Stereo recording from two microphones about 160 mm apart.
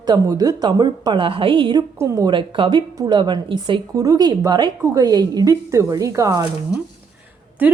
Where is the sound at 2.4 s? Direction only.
30° right (ahead or behind).